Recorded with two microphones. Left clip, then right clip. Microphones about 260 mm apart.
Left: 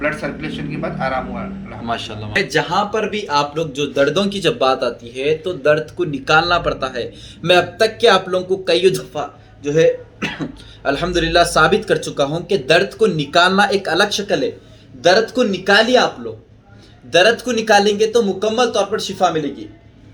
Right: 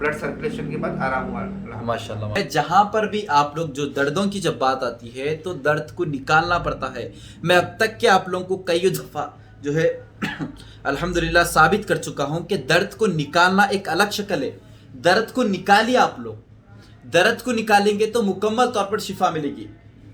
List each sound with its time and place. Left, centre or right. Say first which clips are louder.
0.0 s speech: left 2 dB; centre
15.5 s speech: left 3 dB; centre
17.1 s speech: left 5 dB; centre